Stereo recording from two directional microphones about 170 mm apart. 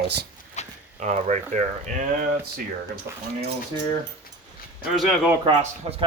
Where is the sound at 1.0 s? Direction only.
45° right (ahead or behind).